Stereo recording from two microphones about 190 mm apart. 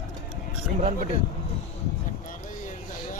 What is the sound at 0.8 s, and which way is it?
Speech, 40° right (ahead or behind).